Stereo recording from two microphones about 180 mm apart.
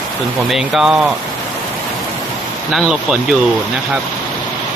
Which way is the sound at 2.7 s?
5° right (ahead or behind).